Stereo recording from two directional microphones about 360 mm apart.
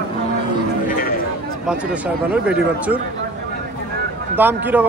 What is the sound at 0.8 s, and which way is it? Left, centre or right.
Chatter, left.